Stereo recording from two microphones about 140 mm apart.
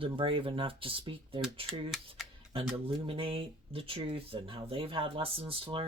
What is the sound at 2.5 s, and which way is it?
Speech, 40° right (ahead or behind).